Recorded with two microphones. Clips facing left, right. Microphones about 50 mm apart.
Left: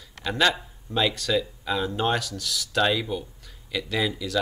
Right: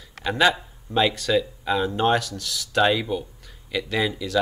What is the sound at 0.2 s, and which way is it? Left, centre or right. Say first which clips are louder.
A man's voice: right 3 dB; centre.